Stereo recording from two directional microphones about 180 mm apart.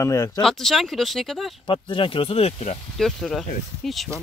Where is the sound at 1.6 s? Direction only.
30° left (ahead or behind).